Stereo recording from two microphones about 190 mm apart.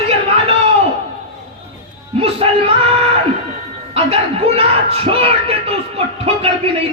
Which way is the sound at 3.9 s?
30° right (ahead or behind).